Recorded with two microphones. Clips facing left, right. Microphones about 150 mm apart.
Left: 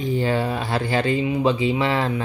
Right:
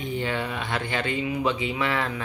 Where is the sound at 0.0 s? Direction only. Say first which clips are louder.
Left 6 dB; 35° left (ahead or behind).